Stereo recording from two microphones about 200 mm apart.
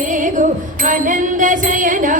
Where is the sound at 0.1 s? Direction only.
40° right (ahead or behind).